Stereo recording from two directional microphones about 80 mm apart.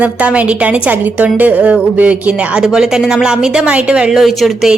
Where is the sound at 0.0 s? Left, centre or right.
Centre.